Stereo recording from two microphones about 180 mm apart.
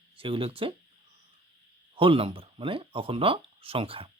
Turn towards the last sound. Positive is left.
turn(degrees=-30)  # may be behind; listen again after turning